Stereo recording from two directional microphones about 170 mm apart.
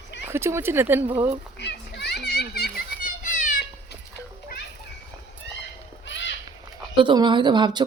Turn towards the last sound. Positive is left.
turn(degrees=-25)  # may be behind; listen again after turning